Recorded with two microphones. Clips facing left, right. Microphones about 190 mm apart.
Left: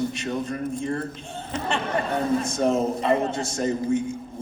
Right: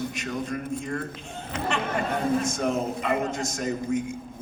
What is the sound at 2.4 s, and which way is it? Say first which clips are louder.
A man's voice: left 4 dB; 35° left (ahead or behind).